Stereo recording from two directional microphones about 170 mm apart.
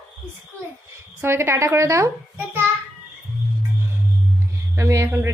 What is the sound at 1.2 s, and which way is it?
A child's voice, 15° right (ahead or behind).